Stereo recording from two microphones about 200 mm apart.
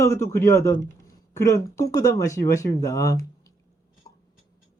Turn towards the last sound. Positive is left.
turn(degrees=15)  # may be behind; listen again after turning